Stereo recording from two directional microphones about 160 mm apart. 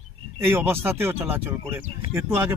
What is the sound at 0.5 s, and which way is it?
Speech, 15° right (ahead or behind).